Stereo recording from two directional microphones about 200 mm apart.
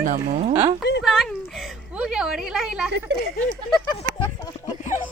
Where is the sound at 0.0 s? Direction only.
40° right (ahead or behind).